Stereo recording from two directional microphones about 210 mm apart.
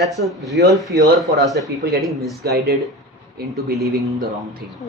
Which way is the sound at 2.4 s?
50° right (ahead or behind).